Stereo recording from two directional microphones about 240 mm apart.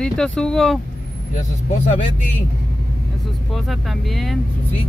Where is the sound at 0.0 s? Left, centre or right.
Centre.